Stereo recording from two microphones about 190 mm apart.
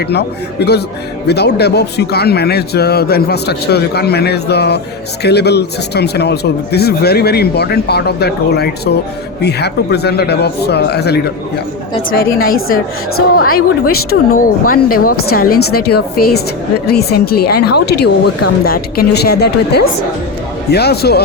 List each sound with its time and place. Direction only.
0.0 s a woman's voice: 60° left (ahead or behind)